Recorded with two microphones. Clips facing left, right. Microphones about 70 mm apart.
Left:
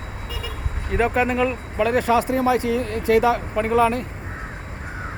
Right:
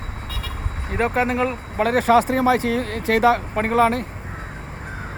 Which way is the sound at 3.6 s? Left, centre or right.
Right.